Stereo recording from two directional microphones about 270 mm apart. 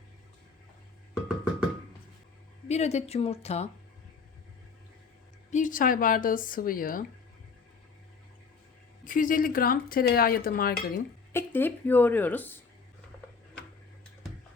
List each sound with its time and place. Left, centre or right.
2.6 s speech: left
5.5 s dishes: left
9.0 s dishes: left
11.3 s speech: centre